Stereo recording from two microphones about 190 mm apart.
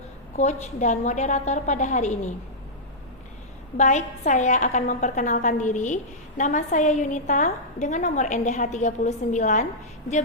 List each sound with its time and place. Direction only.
0.3 s a woman's voice: 40° left (ahead or behind)
3.8 s a woman's voice: 40° left (ahead or behind)